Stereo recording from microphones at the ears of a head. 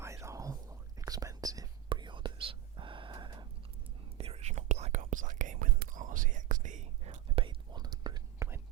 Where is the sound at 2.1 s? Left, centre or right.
Right.